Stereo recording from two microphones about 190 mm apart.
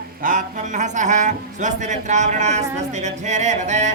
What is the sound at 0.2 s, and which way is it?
Speech, 45° right (ahead or behind).